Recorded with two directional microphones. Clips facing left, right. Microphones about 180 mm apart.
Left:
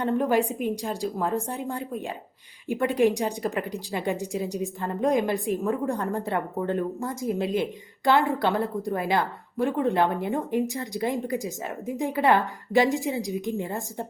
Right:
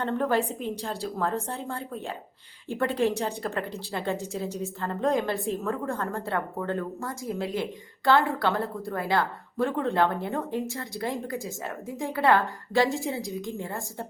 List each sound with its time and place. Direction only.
0.0 s a woman's voice: 15° left (ahead or behind)